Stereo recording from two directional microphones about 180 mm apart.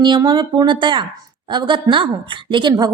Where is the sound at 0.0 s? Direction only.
25° right (ahead or behind).